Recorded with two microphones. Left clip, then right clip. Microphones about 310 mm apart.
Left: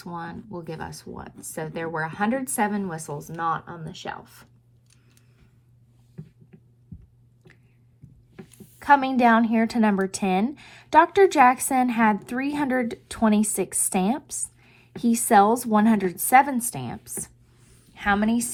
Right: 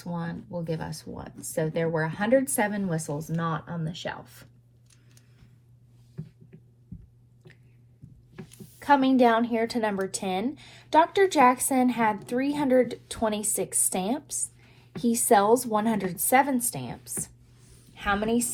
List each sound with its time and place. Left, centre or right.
0.2 s a woman's voice: left
8.8 s a woman's voice: left